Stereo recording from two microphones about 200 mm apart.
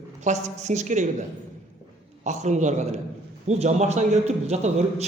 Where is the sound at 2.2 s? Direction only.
35° right (ahead or behind).